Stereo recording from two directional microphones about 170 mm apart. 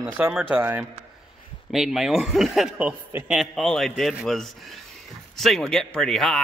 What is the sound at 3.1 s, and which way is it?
Speech, 15° right (ahead or behind).